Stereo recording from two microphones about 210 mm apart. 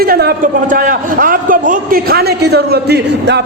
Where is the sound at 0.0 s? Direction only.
45° right (ahead or behind).